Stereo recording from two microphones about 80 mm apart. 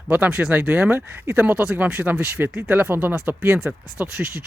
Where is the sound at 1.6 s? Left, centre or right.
Centre.